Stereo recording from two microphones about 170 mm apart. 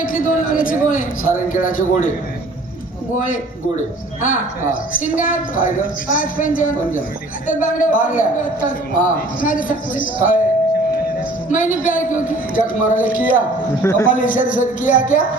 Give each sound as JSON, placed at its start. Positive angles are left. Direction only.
{"t": 0.0, "sound": "a man's voice", "side_deg": 55}
{"t": 4.2, "sound": "a man's voice", "side_deg": 50}
{"t": 11.5, "sound": "a man's voice", "side_deg": 50}
{"t": 13.8, "sound": "a man's voice", "side_deg": 15}
{"t": 14.1, "sound": "a man's voice", "side_deg": 50}